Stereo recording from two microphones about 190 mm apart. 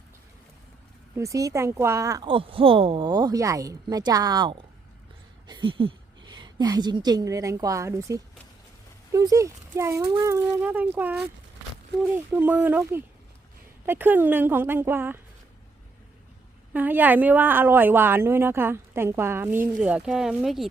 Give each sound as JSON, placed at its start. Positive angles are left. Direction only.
{"t": 1.1, "sound": "a woman's voice", "side_deg": -15}
{"t": 16.7, "sound": "a woman's voice", "side_deg": -10}